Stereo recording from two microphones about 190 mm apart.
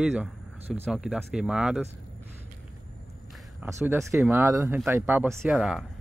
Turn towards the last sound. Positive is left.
turn(degrees=0)  # may be behind; listen again after turning